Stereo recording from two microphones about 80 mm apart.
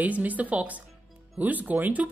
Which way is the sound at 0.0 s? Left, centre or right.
Centre.